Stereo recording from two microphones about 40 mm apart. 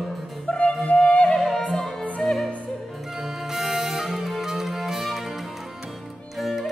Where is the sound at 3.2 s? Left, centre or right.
Centre.